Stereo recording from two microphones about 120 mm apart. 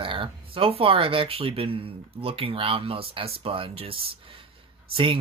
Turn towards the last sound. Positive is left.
turn(degrees=-45)  # may be behind; listen again after turning